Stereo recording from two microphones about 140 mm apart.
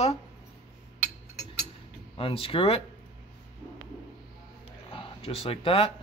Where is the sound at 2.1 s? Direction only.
40° left (ahead or behind).